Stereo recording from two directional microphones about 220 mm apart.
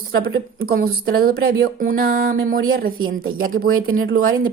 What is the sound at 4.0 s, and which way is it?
Speech, 40° right (ahead or behind).